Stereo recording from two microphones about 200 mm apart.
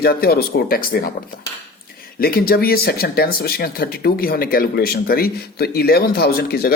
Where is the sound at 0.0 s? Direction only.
50° left (ahead or behind).